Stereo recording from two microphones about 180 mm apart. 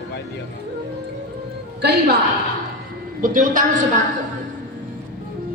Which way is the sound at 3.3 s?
45° right (ahead or behind).